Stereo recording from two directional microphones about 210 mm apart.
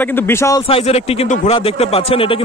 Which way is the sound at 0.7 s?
30° left (ahead or behind).